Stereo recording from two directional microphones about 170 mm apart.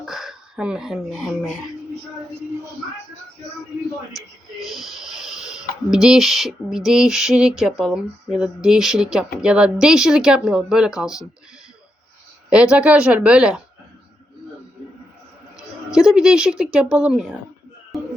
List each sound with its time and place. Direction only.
0.0 s speech: centre (ahead or behind)
4.6 s speech: centre (ahead or behind)
12.5 s a woman's voice: 5° right (ahead or behind)
15.5 s a woman's voice: 5° right (ahead or behind)
17.9 s music: centre (ahead or behind)